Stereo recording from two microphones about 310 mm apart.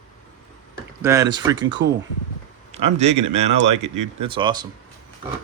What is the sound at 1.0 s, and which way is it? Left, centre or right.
Speech, centre.